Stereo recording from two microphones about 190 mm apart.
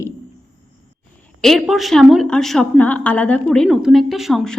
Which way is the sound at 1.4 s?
Centre (ahead or behind).